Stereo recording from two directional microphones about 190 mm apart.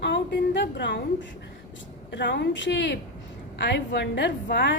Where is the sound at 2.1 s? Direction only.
65° left (ahead or behind).